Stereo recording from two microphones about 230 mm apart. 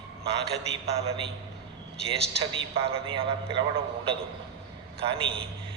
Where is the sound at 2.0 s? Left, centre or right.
Right.